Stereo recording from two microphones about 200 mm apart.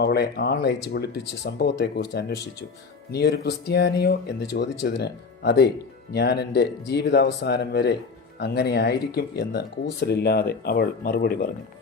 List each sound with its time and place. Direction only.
0.0 s speech: 55° left (ahead or behind)